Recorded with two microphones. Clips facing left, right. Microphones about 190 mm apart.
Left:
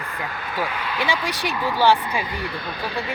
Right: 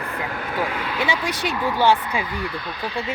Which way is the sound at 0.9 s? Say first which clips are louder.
Even; 20° right (ahead or behind).